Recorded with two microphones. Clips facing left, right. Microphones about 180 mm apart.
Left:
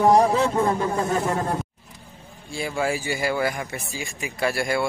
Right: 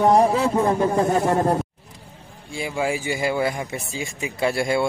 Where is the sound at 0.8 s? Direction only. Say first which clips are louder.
Right 4 dB; 30° right (ahead or behind).